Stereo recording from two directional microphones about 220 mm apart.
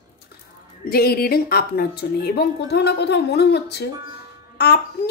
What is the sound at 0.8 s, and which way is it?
A child's voice, 45° left (ahead or behind).